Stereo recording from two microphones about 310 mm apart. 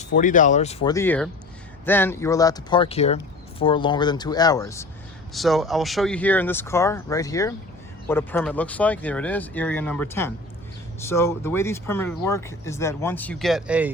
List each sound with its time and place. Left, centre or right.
0.1 s speech: left; by 13.9 s centre